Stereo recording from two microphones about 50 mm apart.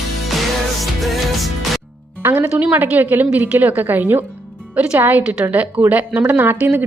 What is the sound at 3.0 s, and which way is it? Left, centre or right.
A woman's voice, right.